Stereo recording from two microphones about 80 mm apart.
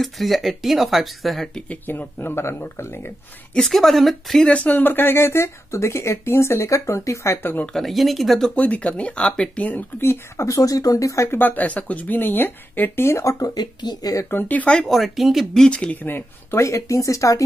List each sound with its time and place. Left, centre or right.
0.0 s speech: centre
1.7 s speech: left
3.5 s speech: centre
4.5 s speech: centre; by 7.5 s left
7.6 s speech: centre
8.5 s speech: centre; by 11.2 s left
11.2 s speech: left
13.6 s speech: left
14.3 s speech: centre
14.8 s speech: centre; by 17.4 s left